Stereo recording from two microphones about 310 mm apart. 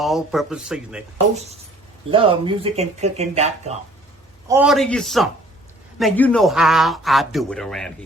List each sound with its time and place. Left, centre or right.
0.0 s a man's voice: centre
2.0 s speech: centre
4.4 s a man's voice: centre